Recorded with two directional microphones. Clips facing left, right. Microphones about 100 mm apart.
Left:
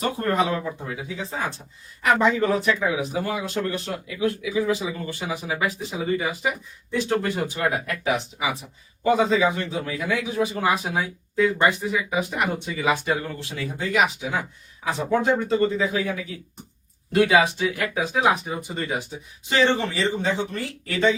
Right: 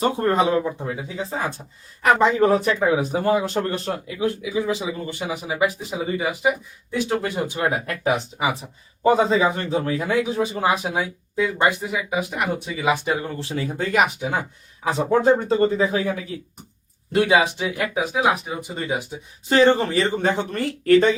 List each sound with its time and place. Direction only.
0.0 s speech: 25° right (ahead or behind)
2.4 s speech: 40° right (ahead or behind); by 7.7 s 20° right (ahead or behind)
7.7 s speech: 30° right (ahead or behind)
10.1 s speech: 30° right (ahead or behind)
13.7 s speech: 50° right (ahead or behind)
15.2 s speech: 35° right (ahead or behind)
17.2 s speech: 20° right (ahead or behind); by 18.6 s 5° right (ahead or behind)
18.8 s speech: 15° right (ahead or behind)
19.5 s speech: 40° right (ahead or behind)